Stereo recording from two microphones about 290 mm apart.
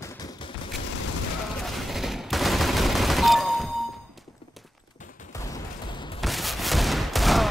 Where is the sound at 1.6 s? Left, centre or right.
Centre.